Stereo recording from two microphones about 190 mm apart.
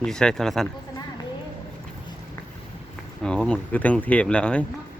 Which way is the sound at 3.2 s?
5° left (ahead or behind).